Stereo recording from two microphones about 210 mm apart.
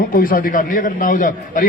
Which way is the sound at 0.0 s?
45° left (ahead or behind).